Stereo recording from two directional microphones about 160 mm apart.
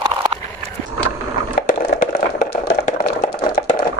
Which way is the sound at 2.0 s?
55° left (ahead or behind).